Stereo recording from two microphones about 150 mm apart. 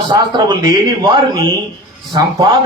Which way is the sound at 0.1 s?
25° right (ahead or behind).